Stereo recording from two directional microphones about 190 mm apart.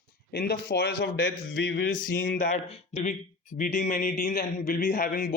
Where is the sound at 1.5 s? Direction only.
75° left (ahead or behind).